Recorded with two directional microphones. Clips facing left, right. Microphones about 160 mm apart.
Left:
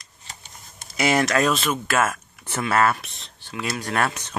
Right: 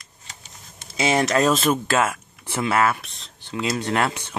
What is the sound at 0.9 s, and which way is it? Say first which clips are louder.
Speech: right 1 dB; 25° right (ahead or behind).